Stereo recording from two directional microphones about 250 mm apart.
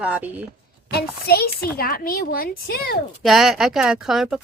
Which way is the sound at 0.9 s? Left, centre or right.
Left.